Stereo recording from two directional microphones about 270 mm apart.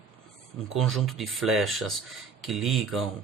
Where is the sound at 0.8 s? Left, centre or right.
Centre.